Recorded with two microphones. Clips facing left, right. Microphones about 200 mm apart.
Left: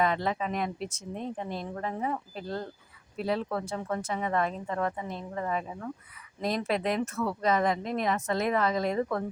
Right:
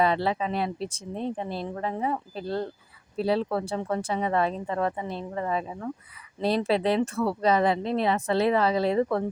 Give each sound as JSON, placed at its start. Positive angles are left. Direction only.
{"t": 0.0, "sound": "speech", "side_deg": -30}